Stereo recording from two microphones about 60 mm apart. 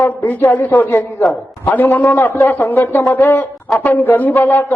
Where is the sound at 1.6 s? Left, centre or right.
Left.